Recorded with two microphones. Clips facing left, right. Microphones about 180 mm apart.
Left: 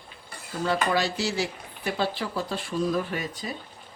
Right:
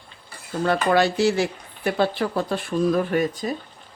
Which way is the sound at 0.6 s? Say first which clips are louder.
Right 6 dB; 60° right (ahead or behind).